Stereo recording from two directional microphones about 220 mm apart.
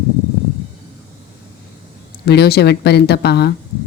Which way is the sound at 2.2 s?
45° left (ahead or behind).